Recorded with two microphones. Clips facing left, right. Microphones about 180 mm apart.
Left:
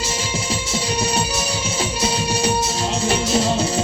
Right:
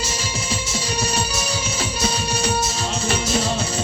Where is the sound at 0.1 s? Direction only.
30° left (ahead or behind).